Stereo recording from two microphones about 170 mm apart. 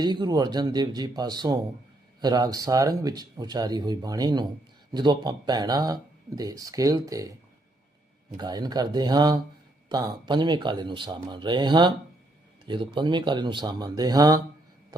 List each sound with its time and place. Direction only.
0.0 s speech: 25° right (ahead or behind)
8.4 s speech: 25° right (ahead or behind)